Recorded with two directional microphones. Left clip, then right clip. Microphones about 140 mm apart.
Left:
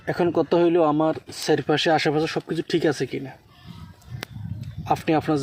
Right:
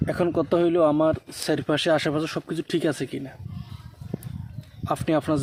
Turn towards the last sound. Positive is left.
turn(degrees=-10)  # may be behind; listen again after turning